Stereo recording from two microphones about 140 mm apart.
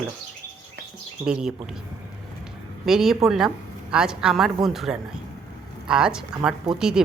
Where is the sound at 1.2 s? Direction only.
5° right (ahead or behind).